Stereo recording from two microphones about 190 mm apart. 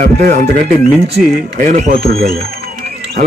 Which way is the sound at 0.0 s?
50° right (ahead or behind).